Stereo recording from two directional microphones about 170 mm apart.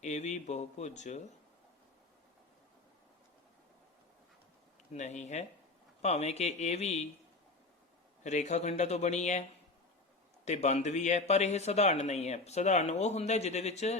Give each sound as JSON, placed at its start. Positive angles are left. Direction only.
{"t": 0.0, "sound": "speech", "side_deg": 40}
{"t": 4.9, "sound": "speech", "side_deg": 45}
{"t": 8.2, "sound": "speech", "side_deg": 45}
{"t": 10.4, "sound": "speech", "side_deg": 40}